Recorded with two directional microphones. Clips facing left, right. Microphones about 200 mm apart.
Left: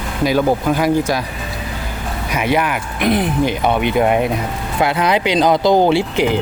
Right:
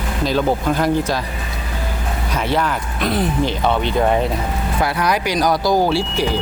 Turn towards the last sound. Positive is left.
turn(degrees=20)  # may be behind; listen again after turning